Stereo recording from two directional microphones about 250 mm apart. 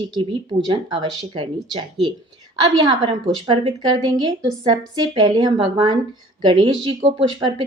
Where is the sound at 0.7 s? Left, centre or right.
Centre.